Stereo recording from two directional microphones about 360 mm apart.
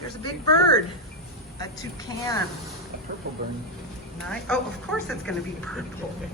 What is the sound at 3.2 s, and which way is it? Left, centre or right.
Speech, right.